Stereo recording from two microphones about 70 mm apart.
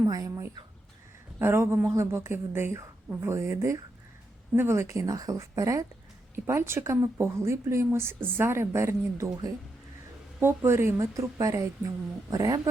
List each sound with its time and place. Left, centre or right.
0.0 s a sound: right
1.4 s speech: right
6.5 s speech: right
10.4 s speech: right